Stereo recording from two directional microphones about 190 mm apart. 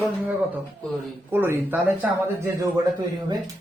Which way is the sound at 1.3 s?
10° right (ahead or behind).